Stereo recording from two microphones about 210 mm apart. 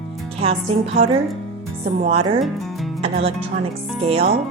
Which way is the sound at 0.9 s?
25° right (ahead or behind).